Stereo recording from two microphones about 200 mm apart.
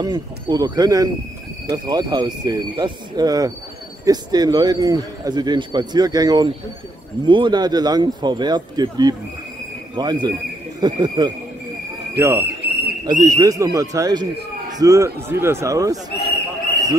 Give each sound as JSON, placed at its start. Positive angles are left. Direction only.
{"t": 0.0, "sound": "speech", "side_deg": -20}